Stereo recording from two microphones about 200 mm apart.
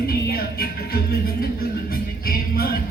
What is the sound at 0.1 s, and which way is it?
Music, 50° left (ahead or behind).